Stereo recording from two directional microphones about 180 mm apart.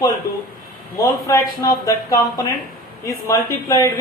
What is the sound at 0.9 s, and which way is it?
Speech, 20° left (ahead or behind).